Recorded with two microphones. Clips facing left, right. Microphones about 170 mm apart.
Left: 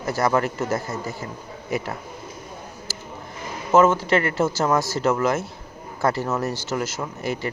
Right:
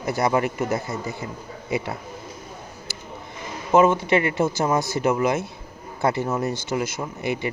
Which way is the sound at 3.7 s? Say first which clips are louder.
Even; 15° right (ahead or behind).